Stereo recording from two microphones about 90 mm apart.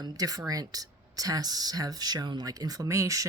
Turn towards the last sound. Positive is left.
turn(degrees=-35)  # may be behind; listen again after turning